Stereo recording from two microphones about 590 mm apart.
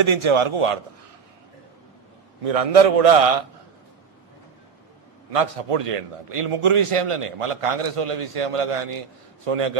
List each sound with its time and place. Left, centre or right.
0.0 s a man's voice: right
2.4 s a man's voice: right
5.3 s a man's voice: right